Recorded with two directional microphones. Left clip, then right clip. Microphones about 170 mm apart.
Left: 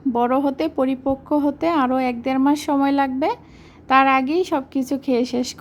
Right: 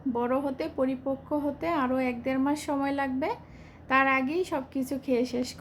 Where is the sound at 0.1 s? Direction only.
40° left (ahead or behind).